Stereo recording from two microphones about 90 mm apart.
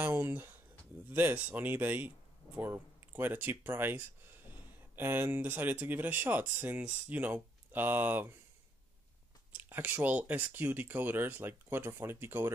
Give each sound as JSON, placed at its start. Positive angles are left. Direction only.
{"t": 0.0, "sound": "speech", "side_deg": -25}
{"t": 9.5, "sound": "speech", "side_deg": -20}